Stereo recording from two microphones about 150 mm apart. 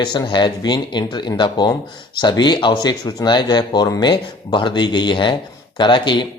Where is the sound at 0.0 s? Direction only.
30° left (ahead or behind).